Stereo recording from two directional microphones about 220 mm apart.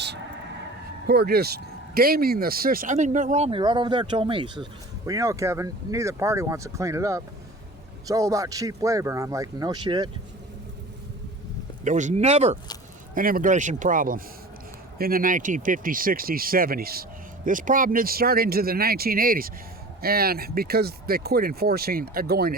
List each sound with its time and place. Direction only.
1.0 s speech: 45° right (ahead or behind); by 10.1 s 20° right (ahead or behind)
11.9 s speech: 35° right (ahead or behind)